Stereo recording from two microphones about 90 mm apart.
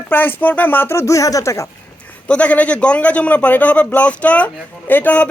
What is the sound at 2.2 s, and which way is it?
A man's voice, 15° left (ahead or behind).